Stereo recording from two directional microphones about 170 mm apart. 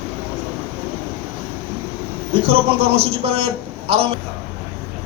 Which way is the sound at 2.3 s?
35° right (ahead or behind).